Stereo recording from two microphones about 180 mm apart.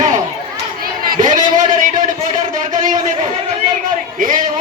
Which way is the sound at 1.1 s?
45° right (ahead or behind).